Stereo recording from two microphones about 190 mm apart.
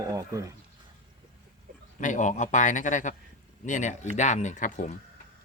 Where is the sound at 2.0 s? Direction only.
40° left (ahead or behind).